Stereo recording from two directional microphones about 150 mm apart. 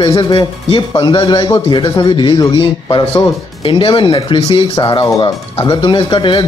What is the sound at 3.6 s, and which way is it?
Speech, 35° left (ahead or behind).